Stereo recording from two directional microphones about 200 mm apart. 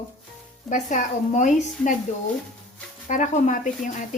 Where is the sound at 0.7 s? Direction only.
40° left (ahead or behind).